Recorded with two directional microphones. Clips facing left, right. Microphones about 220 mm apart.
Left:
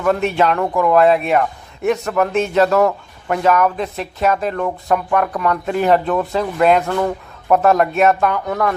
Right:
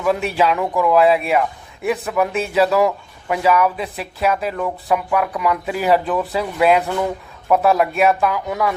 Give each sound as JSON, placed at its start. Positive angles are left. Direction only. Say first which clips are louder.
{"t": 0.0, "sound": "a man's voice", "louder": "left 2 dB", "side_deg": -5}